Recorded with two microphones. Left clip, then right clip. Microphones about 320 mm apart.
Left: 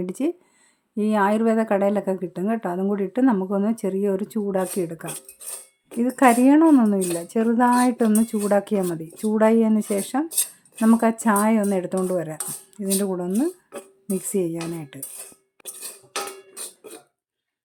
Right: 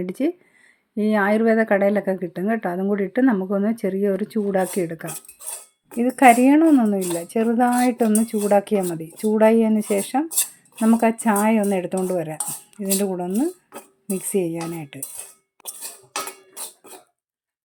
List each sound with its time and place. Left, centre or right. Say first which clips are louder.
0.0 s speech: right 2 dB; centre